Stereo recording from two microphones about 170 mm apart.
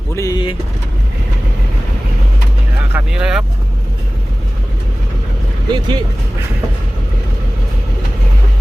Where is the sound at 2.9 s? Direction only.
5° right (ahead or behind).